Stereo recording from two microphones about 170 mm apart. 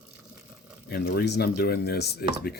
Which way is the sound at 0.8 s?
70° left (ahead or behind).